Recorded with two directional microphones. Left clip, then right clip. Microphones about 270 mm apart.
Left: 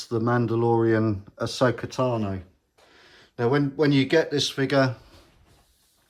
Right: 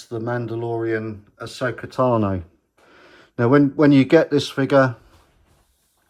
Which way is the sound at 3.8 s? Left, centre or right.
Centre.